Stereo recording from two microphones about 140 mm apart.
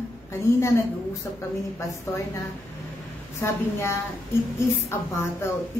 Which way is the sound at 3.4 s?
20° left (ahead or behind).